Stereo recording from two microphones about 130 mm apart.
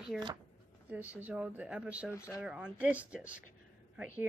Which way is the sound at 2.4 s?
10° right (ahead or behind).